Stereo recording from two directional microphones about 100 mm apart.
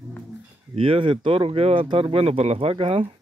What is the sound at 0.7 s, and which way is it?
Speech, 65° right (ahead or behind).